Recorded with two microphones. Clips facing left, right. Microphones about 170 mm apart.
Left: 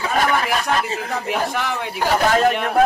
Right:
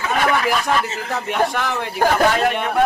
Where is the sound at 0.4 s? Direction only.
Centre (ahead or behind).